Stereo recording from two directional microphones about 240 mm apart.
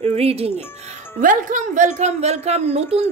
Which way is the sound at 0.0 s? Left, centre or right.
Right.